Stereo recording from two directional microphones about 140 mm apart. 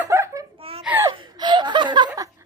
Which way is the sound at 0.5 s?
45° right (ahead or behind).